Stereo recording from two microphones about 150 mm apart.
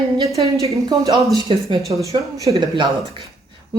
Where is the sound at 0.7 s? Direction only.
20° right (ahead or behind).